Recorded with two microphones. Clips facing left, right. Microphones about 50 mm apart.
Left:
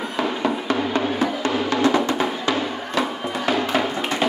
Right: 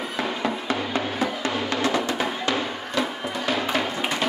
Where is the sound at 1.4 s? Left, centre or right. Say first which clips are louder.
Left 5 dB; left.